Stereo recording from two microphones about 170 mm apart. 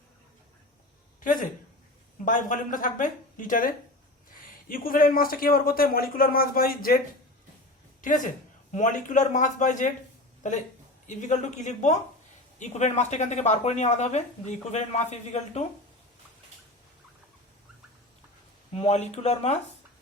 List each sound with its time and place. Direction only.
1.2 s speech: 50° left (ahead or behind)
8.0 s speech: 50° left (ahead or behind)
11.0 s a woman's voice: 45° left (ahead or behind)
18.7 s a woman's voice: 40° left (ahead or behind)